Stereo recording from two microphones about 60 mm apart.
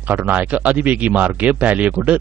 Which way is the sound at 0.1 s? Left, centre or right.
Right.